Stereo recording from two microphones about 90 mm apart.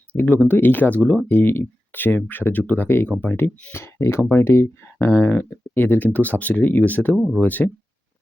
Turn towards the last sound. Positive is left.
turn(degrees=20)  # may be behind; listen again after turning